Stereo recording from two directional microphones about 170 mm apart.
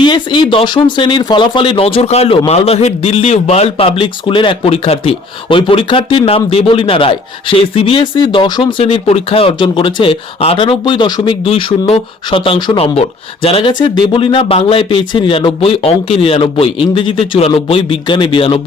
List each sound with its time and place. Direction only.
0.0 s a man's voice: 30° left (ahead or behind)